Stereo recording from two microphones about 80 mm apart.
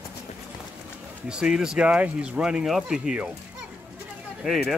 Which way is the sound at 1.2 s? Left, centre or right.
Centre.